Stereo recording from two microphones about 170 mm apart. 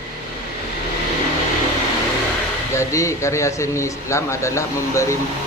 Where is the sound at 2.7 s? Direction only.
15° left (ahead or behind).